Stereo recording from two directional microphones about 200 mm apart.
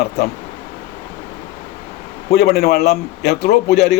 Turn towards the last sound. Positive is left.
turn(degrees=55)  # may be behind; listen again after turning